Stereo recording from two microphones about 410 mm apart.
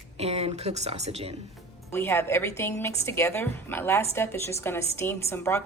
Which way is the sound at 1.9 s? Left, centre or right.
Centre.